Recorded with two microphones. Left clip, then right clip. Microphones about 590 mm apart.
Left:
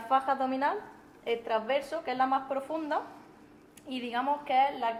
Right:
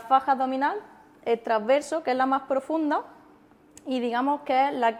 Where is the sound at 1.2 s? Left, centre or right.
Right.